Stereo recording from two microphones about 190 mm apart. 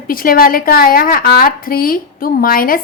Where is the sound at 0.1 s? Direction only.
50° left (ahead or behind).